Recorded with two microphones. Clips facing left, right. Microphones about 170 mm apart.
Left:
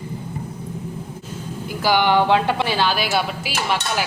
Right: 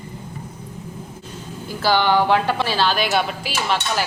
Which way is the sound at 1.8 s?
15° left (ahead or behind).